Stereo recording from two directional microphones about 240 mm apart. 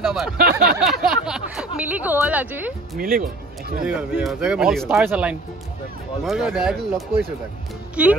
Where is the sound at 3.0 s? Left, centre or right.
Right.